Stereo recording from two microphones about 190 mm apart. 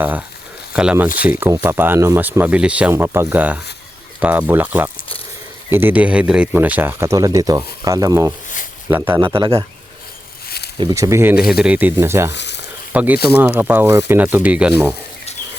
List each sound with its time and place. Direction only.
0.0 s speech: 10° right (ahead or behind)
1.1 s speech: 50° left (ahead or behind)
1.4 s speech: 10° right (ahead or behind)
9.2 s a man's voice: 25° right (ahead or behind)
10.8 s speech: 20° right (ahead or behind)
12.3 s a sound: 65° left (ahead or behind)
12.9 s speech: 10° right (ahead or behind)